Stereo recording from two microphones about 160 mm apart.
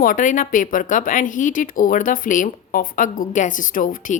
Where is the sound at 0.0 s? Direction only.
55° left (ahead or behind).